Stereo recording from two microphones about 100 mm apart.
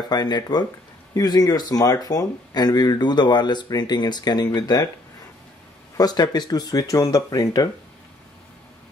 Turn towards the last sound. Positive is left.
turn(degrees=40)  # may be behind; listen again after turning